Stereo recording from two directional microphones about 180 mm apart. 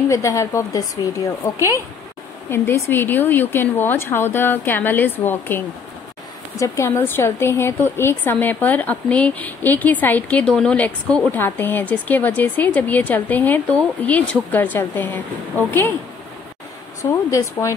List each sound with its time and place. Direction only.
0.1 s a woman's voice: 15° left (ahead or behind)
17.1 s a woman's voice: 15° left (ahead or behind)